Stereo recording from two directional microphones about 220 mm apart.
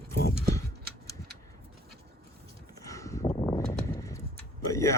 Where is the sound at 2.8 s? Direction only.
15° left (ahead or behind).